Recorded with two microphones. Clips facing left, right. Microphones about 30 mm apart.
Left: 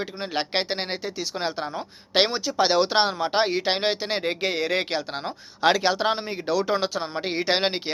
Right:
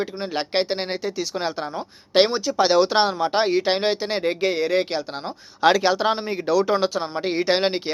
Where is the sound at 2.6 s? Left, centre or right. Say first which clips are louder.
Right 3 dB; left.